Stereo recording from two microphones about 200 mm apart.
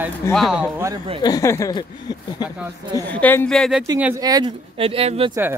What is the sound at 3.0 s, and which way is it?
Speech, 10° left (ahead or behind).